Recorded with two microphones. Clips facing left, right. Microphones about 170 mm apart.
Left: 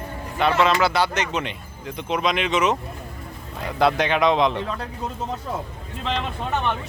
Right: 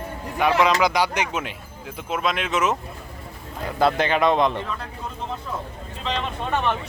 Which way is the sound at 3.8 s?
Centre (ahead or behind).